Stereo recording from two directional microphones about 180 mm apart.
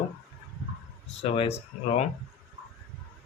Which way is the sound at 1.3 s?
35° left (ahead or behind).